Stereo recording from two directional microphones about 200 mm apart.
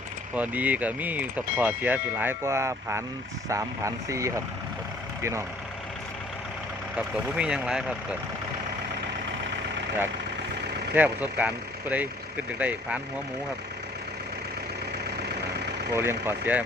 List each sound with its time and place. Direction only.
0.3 s speech: 5° right (ahead or behind)
6.9 s speech: 5° right (ahead or behind)
10.9 s speech: 10° right (ahead or behind)
15.9 s speech: 10° right (ahead or behind)